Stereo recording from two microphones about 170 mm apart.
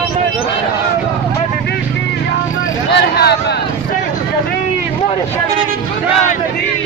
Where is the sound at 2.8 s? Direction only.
80° left.